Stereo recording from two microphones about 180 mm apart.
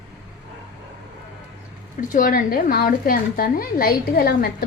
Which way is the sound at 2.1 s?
50° left (ahead or behind).